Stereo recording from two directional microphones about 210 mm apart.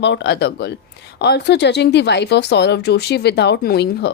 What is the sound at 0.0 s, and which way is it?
Speech, 55° left (ahead or behind).